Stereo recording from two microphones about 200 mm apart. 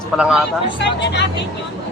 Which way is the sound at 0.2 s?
Centre (ahead or behind).